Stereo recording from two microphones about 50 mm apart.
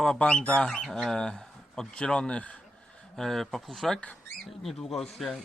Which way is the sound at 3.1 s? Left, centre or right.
Centre.